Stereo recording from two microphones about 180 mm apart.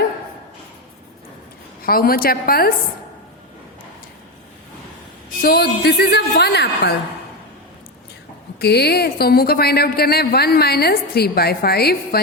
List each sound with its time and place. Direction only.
1.8 s a woman's voice: 55° left (ahead or behind)
5.4 s a woman's voice: 60° left (ahead or behind)
8.5 s a woman's voice: 65° left (ahead or behind)